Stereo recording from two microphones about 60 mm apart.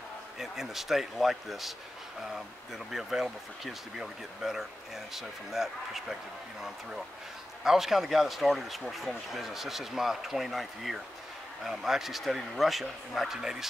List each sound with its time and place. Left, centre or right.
0.4 s speech: centre
7.6 s speech: centre